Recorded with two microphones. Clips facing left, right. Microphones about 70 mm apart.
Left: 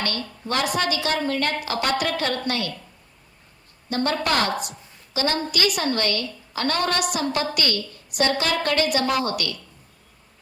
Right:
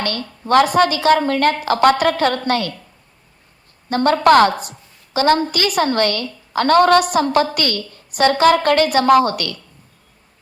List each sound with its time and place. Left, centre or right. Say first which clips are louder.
0.0 s a woman's voice: right 5 dB; right
3.8 s a woman's voice: right 10 dB; right